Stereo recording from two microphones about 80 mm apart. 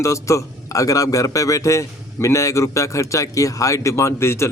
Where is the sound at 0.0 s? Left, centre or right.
Left.